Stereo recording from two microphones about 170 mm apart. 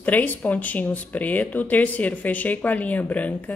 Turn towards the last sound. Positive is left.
turn(degrees=10)  # may be behind; listen again after turning